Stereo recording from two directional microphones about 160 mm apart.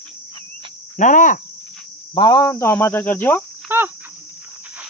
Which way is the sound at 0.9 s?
55° left (ahead or behind).